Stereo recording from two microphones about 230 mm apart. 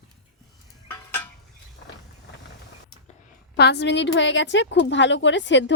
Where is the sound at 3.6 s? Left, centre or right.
Left.